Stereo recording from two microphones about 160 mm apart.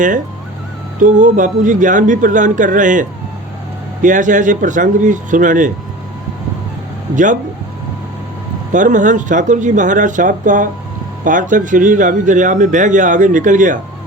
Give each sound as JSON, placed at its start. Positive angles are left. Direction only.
{"t": 1.0, "sound": "speech", "side_deg": -55}
{"t": 8.7, "sound": "speech", "side_deg": -50}